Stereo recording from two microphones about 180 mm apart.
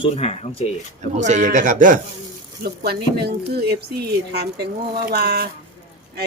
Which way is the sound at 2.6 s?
60° right (ahead or behind).